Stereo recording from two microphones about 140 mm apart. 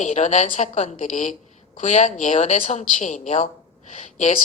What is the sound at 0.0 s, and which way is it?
Speech, 55° left (ahead or behind).